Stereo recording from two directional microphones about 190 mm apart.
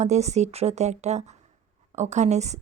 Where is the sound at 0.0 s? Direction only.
35° right (ahead or behind).